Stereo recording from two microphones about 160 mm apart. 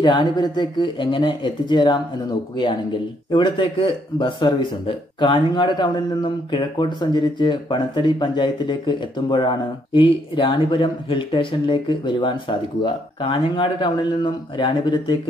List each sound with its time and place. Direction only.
0.0 s a man's voice: 30° left (ahead or behind)
3.3 s a man's voice: 30° left (ahead or behind)